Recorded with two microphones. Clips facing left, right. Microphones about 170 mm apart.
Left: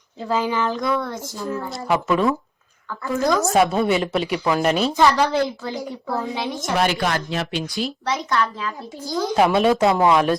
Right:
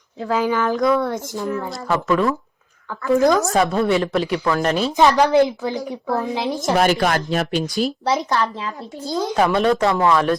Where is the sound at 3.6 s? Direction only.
5° left (ahead or behind).